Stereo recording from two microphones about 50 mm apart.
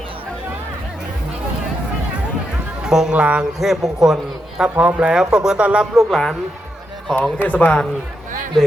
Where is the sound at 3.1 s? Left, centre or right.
Right.